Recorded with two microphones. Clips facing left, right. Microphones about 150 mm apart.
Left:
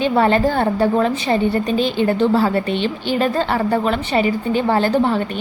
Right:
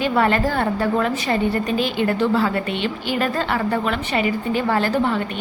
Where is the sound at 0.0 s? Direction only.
25° left (ahead or behind).